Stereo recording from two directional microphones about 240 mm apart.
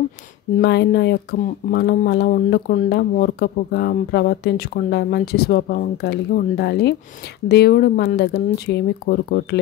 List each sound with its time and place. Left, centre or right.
0.6 s speech: left